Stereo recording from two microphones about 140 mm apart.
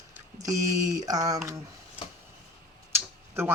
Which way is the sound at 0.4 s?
25° right (ahead or behind).